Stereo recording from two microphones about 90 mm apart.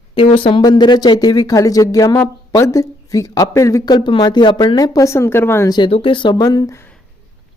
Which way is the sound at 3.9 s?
60° left (ahead or behind).